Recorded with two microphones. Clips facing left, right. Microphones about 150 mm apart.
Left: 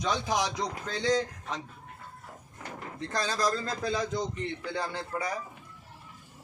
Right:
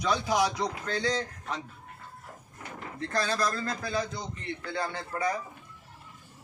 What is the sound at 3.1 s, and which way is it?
Speech, 15° left (ahead or behind).